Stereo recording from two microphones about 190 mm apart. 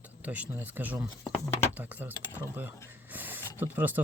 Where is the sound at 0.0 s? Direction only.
10° right (ahead or behind).